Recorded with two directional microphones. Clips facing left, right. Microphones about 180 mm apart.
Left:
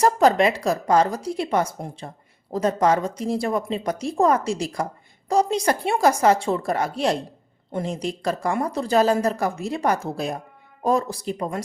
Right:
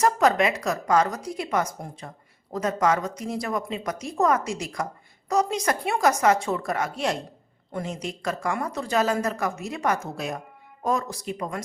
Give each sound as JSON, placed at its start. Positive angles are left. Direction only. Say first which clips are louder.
{"t": 0.0, "sound": "speech", "louder": "left 3 dB", "side_deg": 30}